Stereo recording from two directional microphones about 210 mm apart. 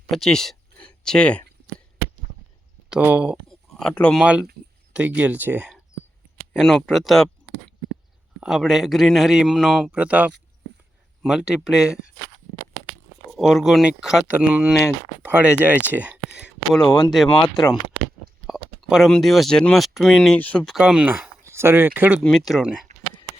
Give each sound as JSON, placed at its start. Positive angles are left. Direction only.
{"t": 0.1, "sound": "speech", "side_deg": 0}
{"t": 2.9, "sound": "speech", "side_deg": -5}
{"t": 3.8, "sound": "speech", "side_deg": 5}
{"t": 13.3, "sound": "speech", "side_deg": 0}
{"t": 17.5, "sound": "speech", "side_deg": 20}
{"t": 18.4, "sound": "speech", "side_deg": 0}
{"t": 20.7, "sound": "speech", "side_deg": -5}
{"t": 22.2, "sound": "speech", "side_deg": 0}